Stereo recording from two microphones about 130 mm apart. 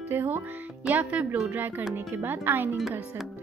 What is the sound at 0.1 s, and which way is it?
Speech, 15° right (ahead or behind).